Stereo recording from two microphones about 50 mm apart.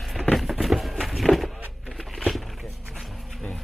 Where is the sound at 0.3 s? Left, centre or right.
Centre.